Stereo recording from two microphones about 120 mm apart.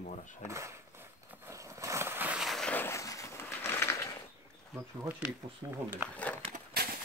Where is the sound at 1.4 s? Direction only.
25° right (ahead or behind).